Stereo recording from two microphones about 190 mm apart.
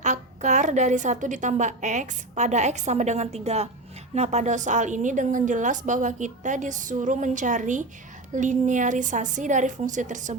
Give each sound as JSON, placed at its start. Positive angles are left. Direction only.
{"t": 0.0, "sound": "a woman's voice", "side_deg": -40}